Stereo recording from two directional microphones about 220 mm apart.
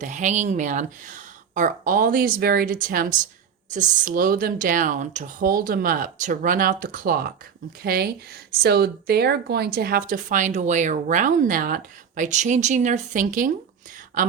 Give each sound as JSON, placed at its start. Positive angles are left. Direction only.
{"t": 0.0, "sound": "speech", "side_deg": -35}